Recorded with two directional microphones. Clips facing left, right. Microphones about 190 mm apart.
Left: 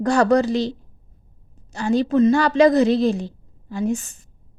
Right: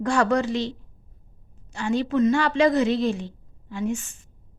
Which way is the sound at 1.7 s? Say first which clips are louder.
Left 5 dB; 40° left (ahead or behind).